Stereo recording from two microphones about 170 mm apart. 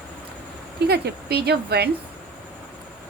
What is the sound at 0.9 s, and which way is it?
A woman's voice, 70° right (ahead or behind).